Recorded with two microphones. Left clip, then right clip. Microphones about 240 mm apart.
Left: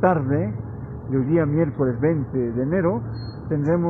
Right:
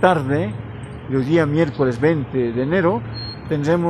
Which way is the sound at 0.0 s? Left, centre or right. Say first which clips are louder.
Right 4 dB; centre.